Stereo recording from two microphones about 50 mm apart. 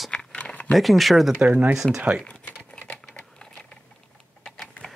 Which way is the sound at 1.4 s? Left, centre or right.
Right.